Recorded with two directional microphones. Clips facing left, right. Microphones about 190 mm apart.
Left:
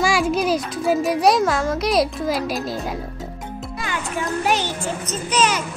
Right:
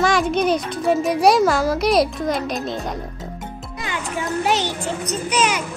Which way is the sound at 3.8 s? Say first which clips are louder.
Even; 20° right (ahead or behind).